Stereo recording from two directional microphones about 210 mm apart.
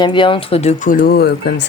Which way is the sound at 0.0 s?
25° left (ahead or behind).